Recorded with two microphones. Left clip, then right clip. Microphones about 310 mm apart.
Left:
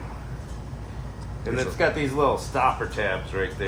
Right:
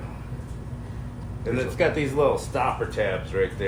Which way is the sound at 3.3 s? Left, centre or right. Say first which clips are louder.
Right 7 dB; centre.